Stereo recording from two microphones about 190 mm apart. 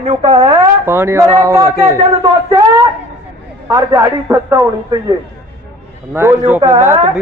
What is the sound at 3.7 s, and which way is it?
Speech, 15° right (ahead or behind).